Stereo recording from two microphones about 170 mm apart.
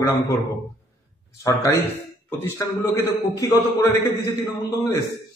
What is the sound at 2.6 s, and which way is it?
A man's voice, 20° left (ahead or behind).